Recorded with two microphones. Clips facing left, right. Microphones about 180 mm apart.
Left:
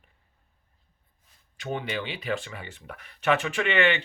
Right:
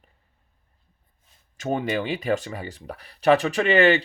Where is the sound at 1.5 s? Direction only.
45° right (ahead or behind).